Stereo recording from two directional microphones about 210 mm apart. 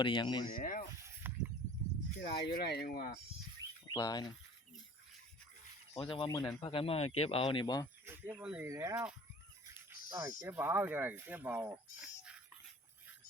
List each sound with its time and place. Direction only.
0.0 s speech: 20° left (ahead or behind)
0.5 s speech: 40° left (ahead or behind)
1.2 s a sound: 10° right (ahead or behind)
2.1 s speech: 45° left (ahead or behind)
3.8 s speech: 20° left (ahead or behind)
5.9 s speech: 25° left (ahead or behind)
8.0 s speech: 10° right (ahead or behind)